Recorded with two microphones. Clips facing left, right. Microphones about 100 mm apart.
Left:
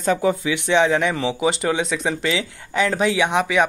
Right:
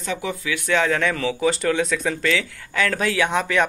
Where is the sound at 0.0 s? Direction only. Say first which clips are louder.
Left 8 dB; 40° left (ahead or behind).